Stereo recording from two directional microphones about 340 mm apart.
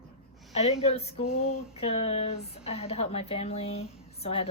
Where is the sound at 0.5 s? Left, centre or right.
Centre.